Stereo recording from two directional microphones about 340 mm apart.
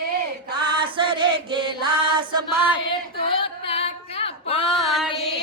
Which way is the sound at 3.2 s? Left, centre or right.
Centre.